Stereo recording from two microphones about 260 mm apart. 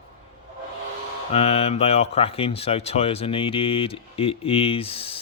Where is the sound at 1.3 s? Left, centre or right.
Left.